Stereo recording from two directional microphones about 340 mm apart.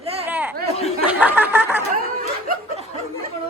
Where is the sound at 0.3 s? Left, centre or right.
Centre.